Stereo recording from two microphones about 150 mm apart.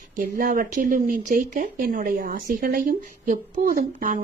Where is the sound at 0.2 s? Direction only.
65° right (ahead or behind).